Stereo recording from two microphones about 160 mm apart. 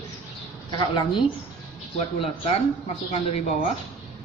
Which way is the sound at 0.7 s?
30° left (ahead or behind).